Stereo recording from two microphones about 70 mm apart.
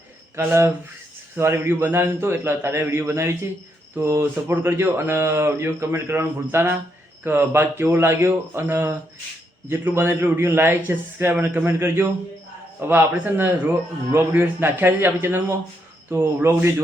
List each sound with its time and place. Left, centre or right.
0.3 s a man's voice: right